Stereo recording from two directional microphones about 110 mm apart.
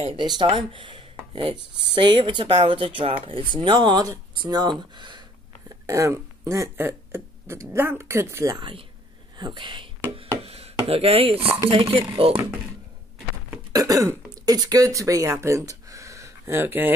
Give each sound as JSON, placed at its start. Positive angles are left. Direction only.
{"t": 0.4, "sound": "speech", "side_deg": -50}
{"t": 5.9, "sound": "speech", "side_deg": -30}
{"t": 8.5, "sound": "speech", "side_deg": -50}
{"t": 10.4, "sound": "speech", "side_deg": -65}
{"t": 13.7, "sound": "speech", "side_deg": -30}